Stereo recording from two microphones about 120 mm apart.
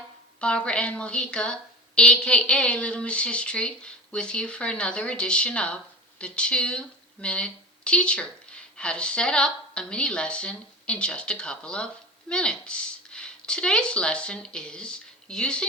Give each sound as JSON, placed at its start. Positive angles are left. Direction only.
{"t": 0.3, "sound": "a woman's voice", "side_deg": 10}